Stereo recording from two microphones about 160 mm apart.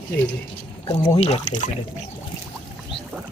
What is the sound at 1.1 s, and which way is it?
Speech, 40° left (ahead or behind).